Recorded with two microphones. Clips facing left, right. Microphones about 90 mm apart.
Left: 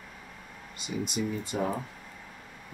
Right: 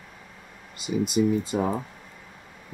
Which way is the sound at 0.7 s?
5° right (ahead or behind).